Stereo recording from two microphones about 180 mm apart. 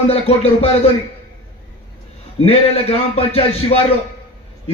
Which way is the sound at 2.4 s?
35° left (ahead or behind).